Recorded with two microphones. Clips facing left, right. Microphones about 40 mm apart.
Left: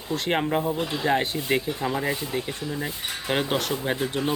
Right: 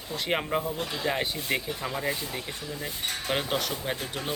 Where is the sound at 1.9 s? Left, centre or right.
Left.